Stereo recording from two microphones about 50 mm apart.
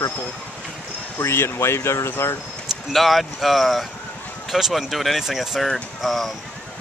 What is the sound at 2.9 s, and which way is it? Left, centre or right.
Speech, centre.